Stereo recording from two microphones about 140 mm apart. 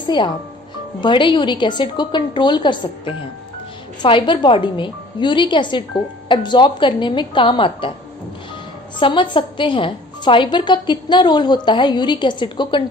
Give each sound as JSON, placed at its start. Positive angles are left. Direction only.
{"t": 0.0, "sound": "speech", "side_deg": 35}
{"t": 9.0, "sound": "speech", "side_deg": 35}